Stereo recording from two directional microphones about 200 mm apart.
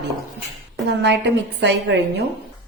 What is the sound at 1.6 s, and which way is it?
Speech, 60° right (ahead or behind).